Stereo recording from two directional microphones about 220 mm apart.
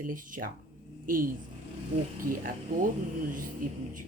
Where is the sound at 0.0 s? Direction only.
40° right (ahead or behind).